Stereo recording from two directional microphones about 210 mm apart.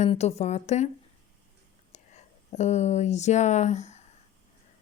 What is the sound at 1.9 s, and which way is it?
Speech, 35° left (ahead or behind).